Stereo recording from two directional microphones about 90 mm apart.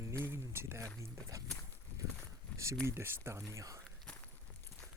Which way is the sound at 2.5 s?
15° left (ahead or behind).